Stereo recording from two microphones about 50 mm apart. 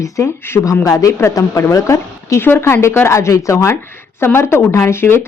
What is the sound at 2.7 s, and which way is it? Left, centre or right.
Speech, left.